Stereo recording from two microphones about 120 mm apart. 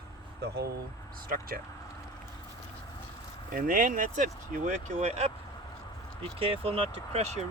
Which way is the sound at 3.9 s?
90° right.